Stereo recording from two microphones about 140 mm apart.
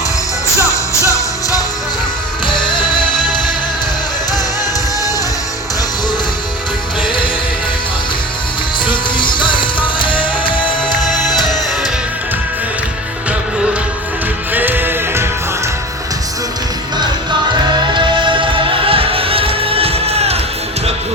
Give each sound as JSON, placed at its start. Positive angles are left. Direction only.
{"t": 1.0, "sound": "music", "side_deg": 25}
{"t": 8.9, "sound": "music", "side_deg": 35}
{"t": 14.5, "sound": "music", "side_deg": -15}
{"t": 17.9, "sound": "music", "side_deg": -35}